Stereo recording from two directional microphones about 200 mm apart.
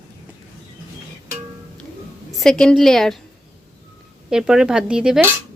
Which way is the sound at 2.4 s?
5° left (ahead or behind).